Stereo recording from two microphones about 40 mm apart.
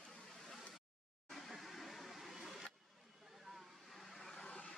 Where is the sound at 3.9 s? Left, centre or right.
Centre.